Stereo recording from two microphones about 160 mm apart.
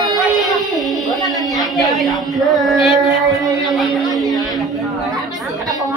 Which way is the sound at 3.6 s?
Centre (ahead or behind).